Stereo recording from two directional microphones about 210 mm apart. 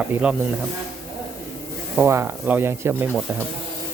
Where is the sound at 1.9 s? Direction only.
10° right (ahead or behind).